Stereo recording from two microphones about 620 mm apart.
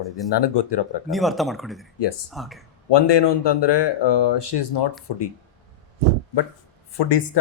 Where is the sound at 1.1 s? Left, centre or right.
Centre.